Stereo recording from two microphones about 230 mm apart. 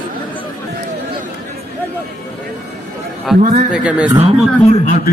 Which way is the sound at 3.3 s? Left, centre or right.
Centre.